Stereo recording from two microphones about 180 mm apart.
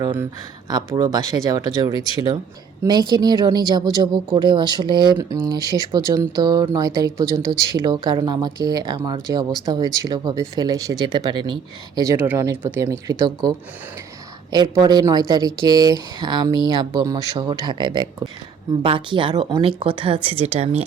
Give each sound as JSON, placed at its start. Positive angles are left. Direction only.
{"t": 0.0, "sound": "speech", "side_deg": -15}
{"t": 12.1, "sound": "speech", "side_deg": -10}